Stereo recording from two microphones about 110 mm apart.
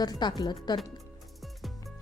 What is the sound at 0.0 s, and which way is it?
Speech, 40° left (ahead or behind).